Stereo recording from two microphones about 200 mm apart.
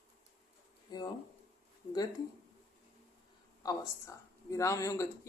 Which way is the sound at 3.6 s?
15° left (ahead or behind).